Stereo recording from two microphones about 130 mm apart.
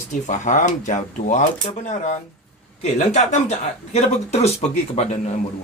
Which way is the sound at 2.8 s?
60° left (ahead or behind).